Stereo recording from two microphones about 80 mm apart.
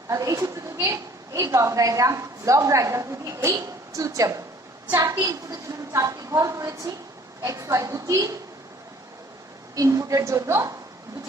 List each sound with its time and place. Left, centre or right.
0.1 s a woman's voice: right
9.7 s a woman's voice: right